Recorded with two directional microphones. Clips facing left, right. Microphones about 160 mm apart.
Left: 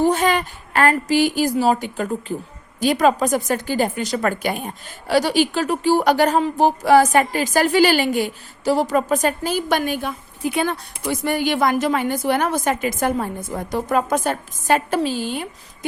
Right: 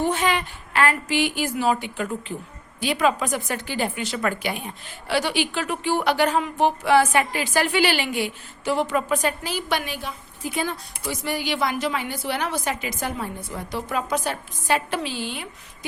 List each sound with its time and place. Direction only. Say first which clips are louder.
0.0 s a woman's voice: left 5 dB; 40° left (ahead or behind)